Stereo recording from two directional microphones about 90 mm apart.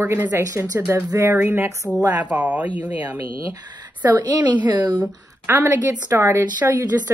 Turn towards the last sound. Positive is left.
turn(degrees=-30)  # may be behind; listen again after turning